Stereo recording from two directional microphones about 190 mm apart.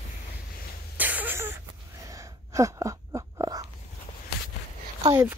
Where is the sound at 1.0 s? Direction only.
10° right (ahead or behind).